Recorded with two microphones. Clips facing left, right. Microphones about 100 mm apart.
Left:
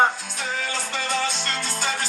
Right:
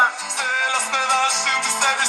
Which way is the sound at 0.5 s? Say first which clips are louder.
Right 6 dB; 75° right (ahead or behind).